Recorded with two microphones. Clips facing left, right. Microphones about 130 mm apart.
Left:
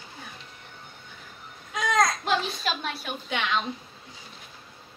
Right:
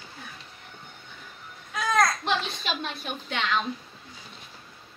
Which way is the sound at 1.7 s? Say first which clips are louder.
Even; 20° left (ahead or behind).